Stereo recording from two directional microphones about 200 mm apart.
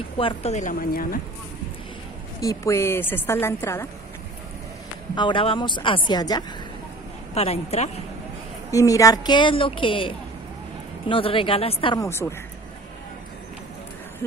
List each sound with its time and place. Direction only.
0.2 s a woman's voice: 30° left (ahead or behind); by 1.2 s 45° left (ahead or behind)
2.4 s a woman's voice: 15° left (ahead or behind)
5.1 s a woman's voice: 25° left (ahead or behind)
7.3 s a woman's voice: 30° left (ahead or behind)
8.7 s a woman's voice: 15° left (ahead or behind)